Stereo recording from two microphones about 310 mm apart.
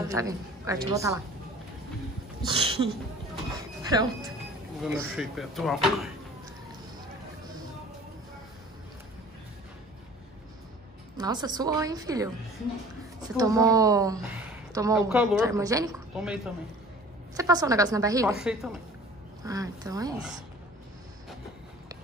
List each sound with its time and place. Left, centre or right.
0.1 s a woman's voice: centre
2.4 s a sound: centre
4.8 s speech: centre
11.1 s a woman's voice: centre
13.4 s a woman's voice: centre
17.4 s a woman's voice: centre